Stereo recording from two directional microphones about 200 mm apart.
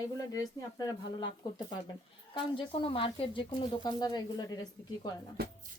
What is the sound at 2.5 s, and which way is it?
Speech, 25° left (ahead or behind).